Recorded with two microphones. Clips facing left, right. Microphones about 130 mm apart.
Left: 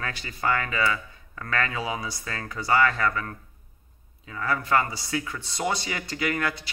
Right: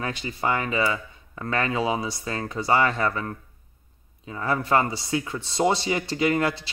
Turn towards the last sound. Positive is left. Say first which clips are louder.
# right 5 dB
turn(degrees=-25)  # may be behind; listen again after turning